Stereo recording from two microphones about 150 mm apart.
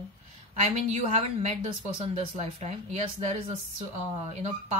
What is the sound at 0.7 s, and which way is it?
Speech, 50° right (ahead or behind).